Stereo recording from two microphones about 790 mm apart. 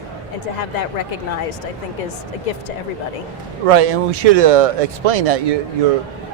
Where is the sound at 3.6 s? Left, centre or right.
Right.